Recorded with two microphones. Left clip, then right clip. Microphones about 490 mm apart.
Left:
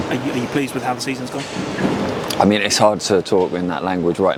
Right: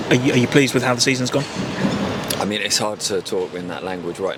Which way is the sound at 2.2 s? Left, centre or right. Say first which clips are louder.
Left 10 dB; left.